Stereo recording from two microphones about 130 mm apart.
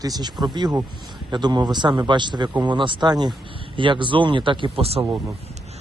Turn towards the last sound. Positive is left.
turn(degrees=-50)  # may be behind; listen again after turning